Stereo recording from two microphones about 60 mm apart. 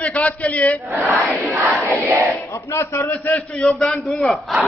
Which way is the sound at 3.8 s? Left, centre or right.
Centre.